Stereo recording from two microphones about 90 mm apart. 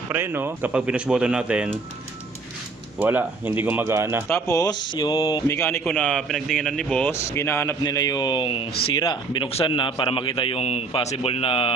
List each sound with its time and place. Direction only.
0.1 s speech: 25° right (ahead or behind)
0.8 s speech: 10° right (ahead or behind)
3.0 s speech: 20° right (ahead or behind)
3.9 s speech: 30° right (ahead or behind)
4.3 s a man's voice: 40° left (ahead or behind)
4.9 s a sound: 55° left (ahead or behind)
5.1 s a man's voice: 80° left
5.5 s a man's voice: 30° left (ahead or behind)
5.9 s a man's voice: 10° left (ahead or behind)
7.0 s a man's voice: 30° left (ahead or behind)
7.9 s a man's voice: 45° left (ahead or behind); by 11.7 s 90° left